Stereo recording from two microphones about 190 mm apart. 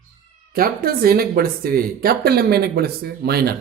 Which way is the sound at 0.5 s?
50° right (ahead or behind).